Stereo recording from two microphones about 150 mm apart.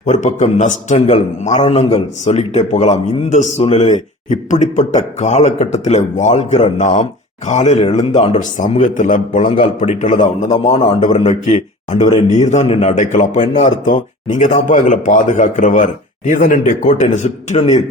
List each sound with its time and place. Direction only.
0.0 s a man's voice: 55° left (ahead or behind)